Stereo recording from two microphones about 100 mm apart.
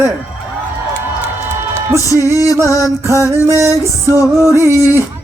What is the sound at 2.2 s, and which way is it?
A man's voice, 25° right (ahead or behind).